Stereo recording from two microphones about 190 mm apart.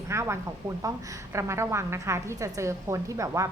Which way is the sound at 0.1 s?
15° right (ahead or behind).